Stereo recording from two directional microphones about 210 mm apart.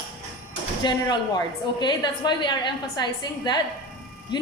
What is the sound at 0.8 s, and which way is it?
A woman's voice, 20° left (ahead or behind).